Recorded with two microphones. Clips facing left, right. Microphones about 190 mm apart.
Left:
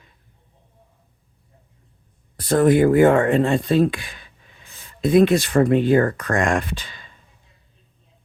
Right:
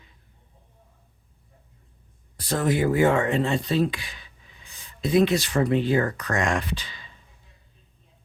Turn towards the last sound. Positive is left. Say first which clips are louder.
# left 1 dB
turn(degrees=50)  # may be behind; listen again after turning